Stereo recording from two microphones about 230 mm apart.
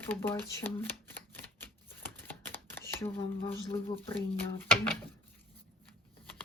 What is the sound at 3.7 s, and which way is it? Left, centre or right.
Speech, left.